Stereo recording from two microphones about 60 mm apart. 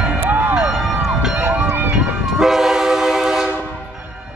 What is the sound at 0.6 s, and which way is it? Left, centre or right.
Music, centre.